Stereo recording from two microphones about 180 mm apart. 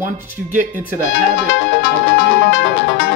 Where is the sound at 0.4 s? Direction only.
Centre (ahead or behind).